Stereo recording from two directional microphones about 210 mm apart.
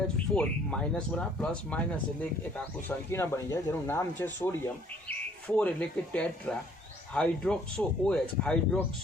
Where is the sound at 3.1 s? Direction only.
10° left (ahead or behind).